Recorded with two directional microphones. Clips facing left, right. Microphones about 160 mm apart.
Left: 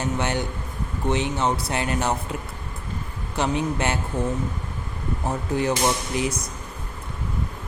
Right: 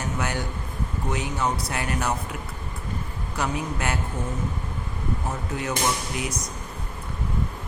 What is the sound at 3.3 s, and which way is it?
Speech, 25° left (ahead or behind).